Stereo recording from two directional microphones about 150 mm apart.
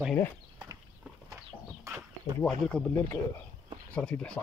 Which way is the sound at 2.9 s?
15° left (ahead or behind).